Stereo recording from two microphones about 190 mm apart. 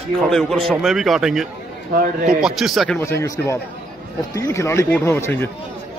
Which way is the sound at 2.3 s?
5° right (ahead or behind).